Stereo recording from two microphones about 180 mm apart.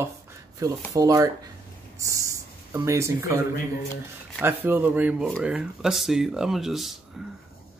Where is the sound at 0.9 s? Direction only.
20° right (ahead or behind).